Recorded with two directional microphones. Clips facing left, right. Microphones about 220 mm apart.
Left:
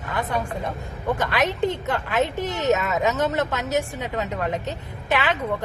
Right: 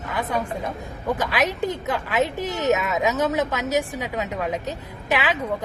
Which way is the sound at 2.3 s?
20° left (ahead or behind).